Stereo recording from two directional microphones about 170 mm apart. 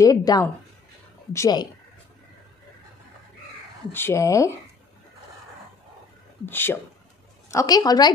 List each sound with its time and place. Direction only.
0.0 s a woman's voice: 20° left (ahead or behind)
3.9 s speech: 15° left (ahead or behind)
6.4 s a woman's voice: 10° left (ahead or behind)